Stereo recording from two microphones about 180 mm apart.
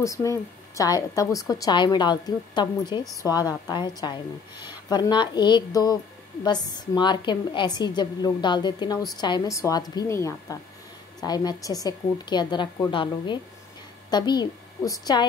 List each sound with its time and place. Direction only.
0.0 s a woman's voice: 15° left (ahead or behind)